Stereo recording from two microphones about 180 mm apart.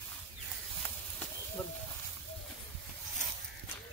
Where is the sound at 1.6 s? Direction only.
10° left (ahead or behind).